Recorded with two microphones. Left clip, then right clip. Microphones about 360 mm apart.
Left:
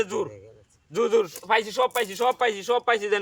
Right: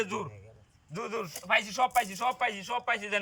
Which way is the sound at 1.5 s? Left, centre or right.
Centre.